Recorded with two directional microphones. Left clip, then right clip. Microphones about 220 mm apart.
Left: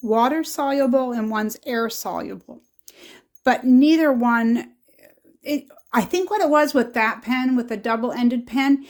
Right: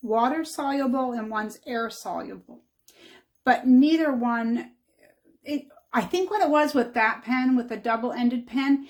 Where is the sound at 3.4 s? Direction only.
45° left (ahead or behind).